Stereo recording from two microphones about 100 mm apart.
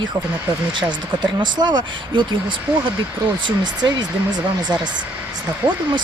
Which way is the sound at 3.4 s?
45° right (ahead or behind).